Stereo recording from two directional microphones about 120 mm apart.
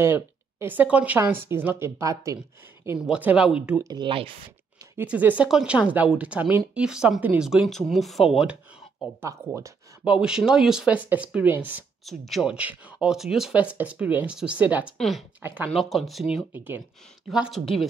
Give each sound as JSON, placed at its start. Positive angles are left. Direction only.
{"t": 0.0, "sound": "speech", "side_deg": -20}
{"t": 3.1, "sound": "speech", "side_deg": -10}
{"t": 3.8, "sound": "speech", "side_deg": -35}
{"t": 4.9, "sound": "speech", "side_deg": -15}
{"t": 7.4, "sound": "speech", "side_deg": 0}
{"t": 9.2, "sound": "speech", "side_deg": -20}
{"t": 10.2, "sound": "speech", "side_deg": -5}
{"t": 12.0, "sound": "speech", "side_deg": 0}
{"t": 12.5, "sound": "speech", "side_deg": -10}
{"t": 15.0, "sound": "speech", "side_deg": 0}
{"t": 15.4, "sound": "speech", "side_deg": -15}
{"t": 15.7, "sound": "speech", "side_deg": 0}
{"t": 16.5, "sound": "speech", "side_deg": -15}
{"t": 17.3, "sound": "speech", "side_deg": 0}